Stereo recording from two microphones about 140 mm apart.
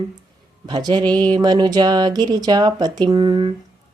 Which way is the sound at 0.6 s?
30° right (ahead or behind).